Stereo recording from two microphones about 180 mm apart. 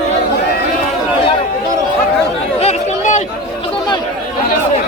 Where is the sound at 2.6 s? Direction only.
45° left (ahead or behind).